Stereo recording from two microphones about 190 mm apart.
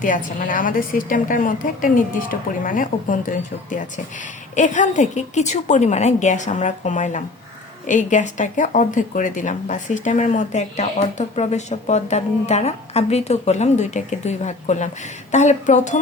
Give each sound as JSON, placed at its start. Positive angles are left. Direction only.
{"t": 0.0, "sound": "a woman's voice", "side_deg": 45}